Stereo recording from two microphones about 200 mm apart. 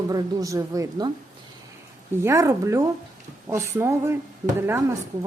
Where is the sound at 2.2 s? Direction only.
15° right (ahead or behind).